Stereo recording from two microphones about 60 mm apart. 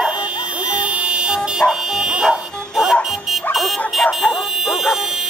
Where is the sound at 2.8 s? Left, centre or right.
Centre.